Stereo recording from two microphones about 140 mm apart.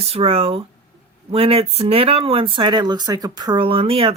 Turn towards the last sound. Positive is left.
turn(degrees=-40)  # may be behind; listen again after turning